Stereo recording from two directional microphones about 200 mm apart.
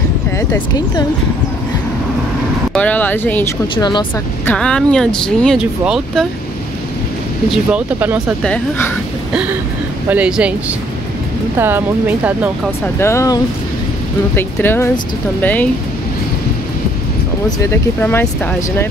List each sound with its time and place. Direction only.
0.4 s speech: 15° left (ahead or behind)
2.7 s speech: 5° left (ahead or behind)
3.7 s speech: 20° left (ahead or behind)
4.5 s speech: 5° left (ahead or behind)
7.7 s speech: 10° right (ahead or behind)
8.4 s speech: 10° left (ahead or behind)
10.0 s speech: 5° right (ahead or behind)
11.5 s speech: 10° right (ahead or behind)
12.8 s speech: 15° left (ahead or behind)
17.5 s speech: 10° left (ahead or behind)